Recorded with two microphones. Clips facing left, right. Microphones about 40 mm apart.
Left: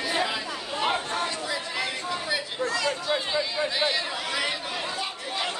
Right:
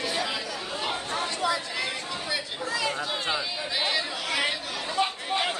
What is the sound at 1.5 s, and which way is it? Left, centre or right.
Chatter, centre.